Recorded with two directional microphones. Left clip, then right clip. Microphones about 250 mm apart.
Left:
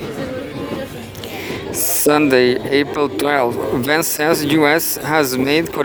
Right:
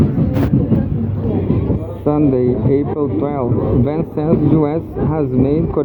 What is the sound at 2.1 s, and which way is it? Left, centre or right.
Speech, left.